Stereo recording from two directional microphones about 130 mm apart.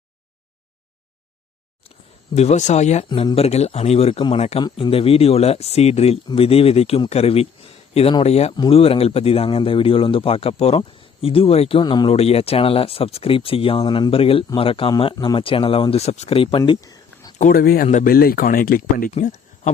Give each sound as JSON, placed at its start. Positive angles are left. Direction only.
{"t": 2.3, "sound": "speech", "side_deg": 55}
{"t": 11.8, "sound": "speech", "side_deg": 35}
{"t": 16.8, "sound": "a sound", "side_deg": 30}
{"t": 17.3, "sound": "speech", "side_deg": 80}